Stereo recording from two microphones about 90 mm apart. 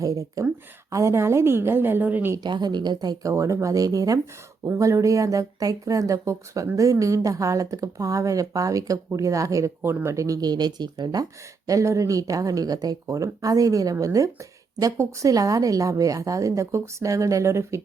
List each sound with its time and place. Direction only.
0.0 s a woman's voice: 35° right (ahead or behind); by 2.3 s 20° right (ahead or behind)
2.4 s speech: 50° right (ahead or behind)
3.2 s speech: 35° right (ahead or behind)